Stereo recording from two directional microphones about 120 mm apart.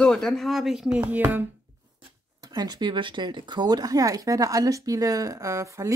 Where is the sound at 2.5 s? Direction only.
35° right (ahead or behind).